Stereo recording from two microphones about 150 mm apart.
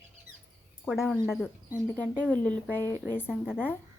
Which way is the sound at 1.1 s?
5° right (ahead or behind).